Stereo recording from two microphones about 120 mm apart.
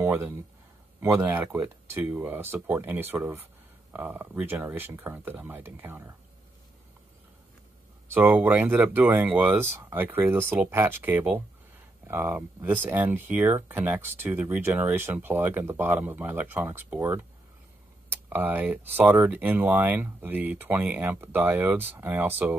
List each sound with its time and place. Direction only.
0.0 s speech: 20° right (ahead or behind)
8.1 s speech: 15° right (ahead or behind)